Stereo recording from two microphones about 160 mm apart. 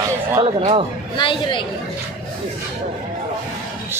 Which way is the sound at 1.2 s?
30° left (ahead or behind).